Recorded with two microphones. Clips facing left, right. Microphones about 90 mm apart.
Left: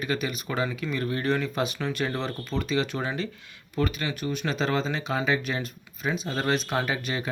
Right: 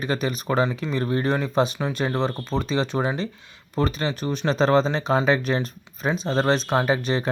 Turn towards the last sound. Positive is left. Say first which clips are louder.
# right 6 dB
turn(degrees=-30)  # may be behind; listen again after turning